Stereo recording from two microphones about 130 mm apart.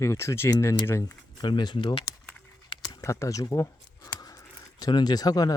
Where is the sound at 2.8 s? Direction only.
25° left (ahead or behind).